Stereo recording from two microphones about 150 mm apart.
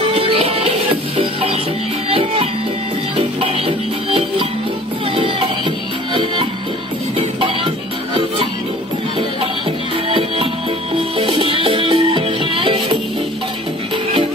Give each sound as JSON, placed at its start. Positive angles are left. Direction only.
{"t": 0.1, "sound": "music", "side_deg": -40}
{"t": 7.2, "sound": "music", "side_deg": -35}
{"t": 10.1, "sound": "music", "side_deg": -40}